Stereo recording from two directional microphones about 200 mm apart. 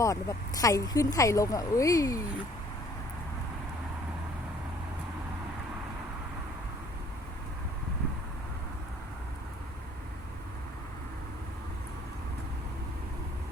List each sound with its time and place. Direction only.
0.0 s speech: 15° left (ahead or behind)